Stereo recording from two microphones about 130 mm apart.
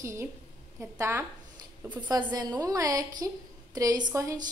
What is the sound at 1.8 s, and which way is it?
Speech, 10° right (ahead or behind).